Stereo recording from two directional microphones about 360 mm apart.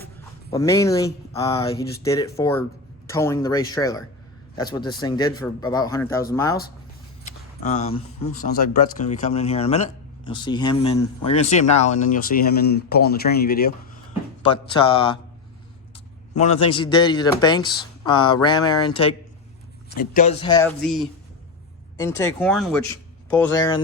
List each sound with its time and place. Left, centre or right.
0.5 s speech: centre
7.3 s a sound: centre
8.3 s speech: left
14.4 s speech: centre
16.4 s speech: centre